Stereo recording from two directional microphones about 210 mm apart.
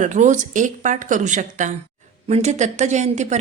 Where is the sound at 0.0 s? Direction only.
35° right (ahead or behind).